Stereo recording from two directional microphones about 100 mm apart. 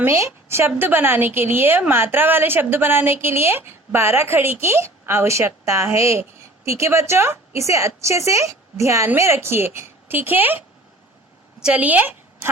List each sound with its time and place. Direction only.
0.0 s a woman's voice: 25° right (ahead or behind)
11.6 s speech: 15° right (ahead or behind)